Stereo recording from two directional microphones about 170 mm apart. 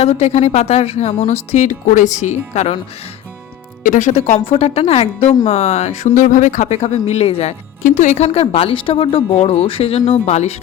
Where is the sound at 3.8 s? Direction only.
45° left (ahead or behind).